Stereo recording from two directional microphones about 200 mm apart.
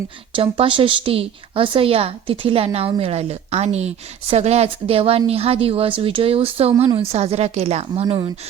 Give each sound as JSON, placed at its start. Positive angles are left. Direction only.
{"t": 0.3, "sound": "a woman's voice", "side_deg": -25}